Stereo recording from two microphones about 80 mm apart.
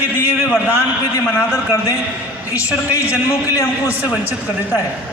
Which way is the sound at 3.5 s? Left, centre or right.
Left.